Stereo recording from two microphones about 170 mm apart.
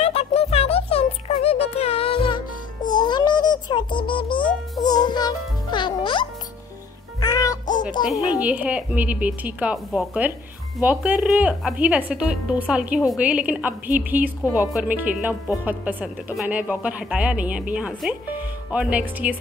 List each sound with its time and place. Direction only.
0.0 s music: 35° left (ahead or behind); by 7.8 s 20° left (ahead or behind)
8.4 s a woman's voice: 10° right (ahead or behind)